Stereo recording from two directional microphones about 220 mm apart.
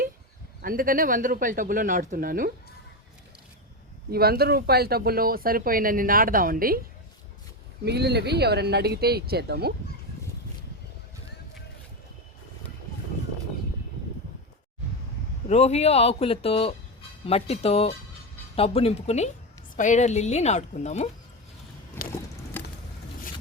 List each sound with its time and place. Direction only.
0.6 s speech: 40° right (ahead or behind)
4.1 s speech: 45° right (ahead or behind)
7.9 s speech: 50° right (ahead or behind)
15.4 s a man's voice: 30° left (ahead or behind)
22.5 s a sound: 10° left (ahead or behind)